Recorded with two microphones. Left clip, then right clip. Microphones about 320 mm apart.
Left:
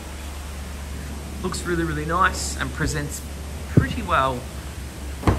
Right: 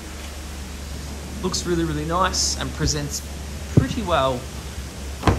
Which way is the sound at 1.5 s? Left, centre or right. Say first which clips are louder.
Right 1 dB; centre.